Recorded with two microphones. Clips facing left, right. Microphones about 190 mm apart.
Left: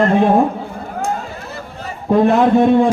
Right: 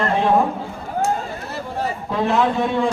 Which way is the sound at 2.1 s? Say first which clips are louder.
Left 8 dB; 50° left (ahead or behind).